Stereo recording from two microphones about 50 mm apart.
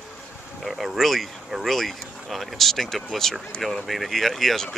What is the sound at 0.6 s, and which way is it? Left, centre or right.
Speech, centre.